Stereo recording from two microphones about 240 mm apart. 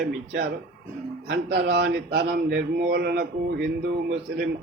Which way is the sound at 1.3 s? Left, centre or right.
Right.